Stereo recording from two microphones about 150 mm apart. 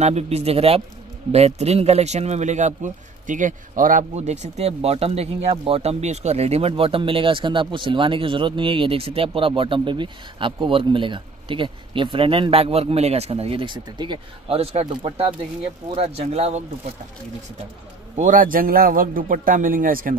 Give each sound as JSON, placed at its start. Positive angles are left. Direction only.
{"t": 0.0, "sound": "a man's voice", "side_deg": -45}
{"t": 18.1, "sound": "a man's voice", "side_deg": -60}